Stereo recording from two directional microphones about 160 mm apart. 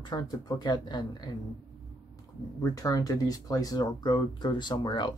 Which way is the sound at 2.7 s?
20° left (ahead or behind).